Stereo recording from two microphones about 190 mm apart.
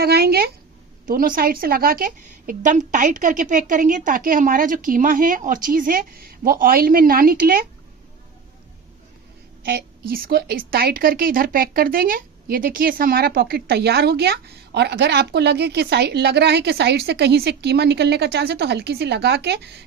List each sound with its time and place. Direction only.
0.0 s a woman's voice: 55° right (ahead or behind)
9.6 s a woman's voice: 55° right (ahead or behind)